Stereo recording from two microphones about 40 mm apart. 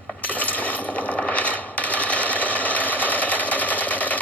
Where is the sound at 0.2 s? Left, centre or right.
Left.